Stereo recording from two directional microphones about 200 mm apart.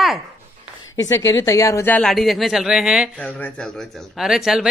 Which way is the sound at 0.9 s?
70° left (ahead or behind).